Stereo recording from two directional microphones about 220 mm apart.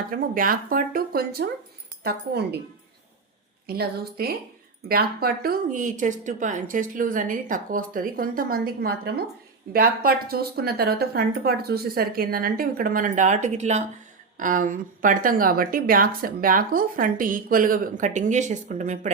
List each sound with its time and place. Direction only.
0.1 s a woman's voice: 40° right (ahead or behind)
3.7 s a woman's voice: 45° right (ahead or behind)